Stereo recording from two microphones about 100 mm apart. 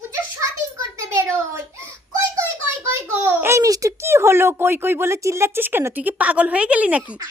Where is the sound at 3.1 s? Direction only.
25° right (ahead or behind).